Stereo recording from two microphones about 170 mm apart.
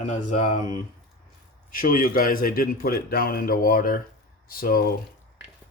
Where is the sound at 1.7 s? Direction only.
55° left (ahead or behind).